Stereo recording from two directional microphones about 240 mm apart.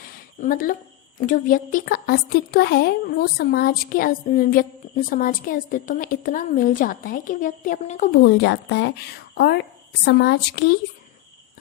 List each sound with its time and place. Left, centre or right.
0.3 s a woman's voice: left
8.2 s a woman's voice: left